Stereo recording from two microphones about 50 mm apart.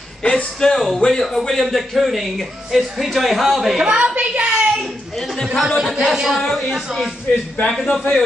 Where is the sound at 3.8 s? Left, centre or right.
Right.